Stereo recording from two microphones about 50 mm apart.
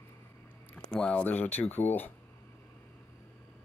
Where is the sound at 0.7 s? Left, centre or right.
Centre.